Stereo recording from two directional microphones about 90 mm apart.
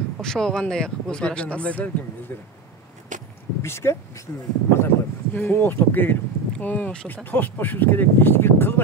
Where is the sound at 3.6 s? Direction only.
30° left (ahead or behind).